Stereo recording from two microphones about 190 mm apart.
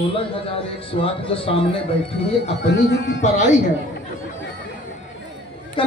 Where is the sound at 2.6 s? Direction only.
65° left (ahead or behind).